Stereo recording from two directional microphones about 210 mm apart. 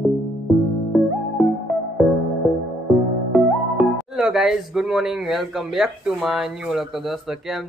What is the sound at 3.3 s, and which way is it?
Speech, centre (ahead or behind).